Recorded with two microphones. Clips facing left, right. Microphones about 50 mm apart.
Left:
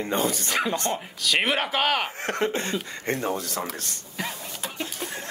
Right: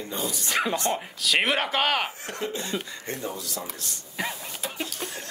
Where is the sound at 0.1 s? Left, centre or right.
Left.